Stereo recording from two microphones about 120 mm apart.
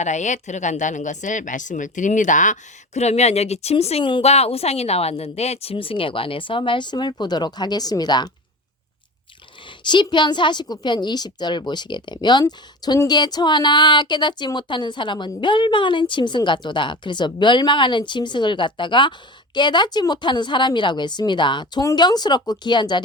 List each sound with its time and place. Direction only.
0.0 s speech: 80° left; by 8.3 s 35° left (ahead or behind)
9.6 s a woman's voice: 40° left (ahead or behind)